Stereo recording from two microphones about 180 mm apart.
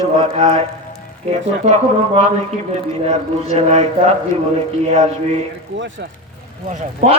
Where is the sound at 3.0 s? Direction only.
35° right (ahead or behind).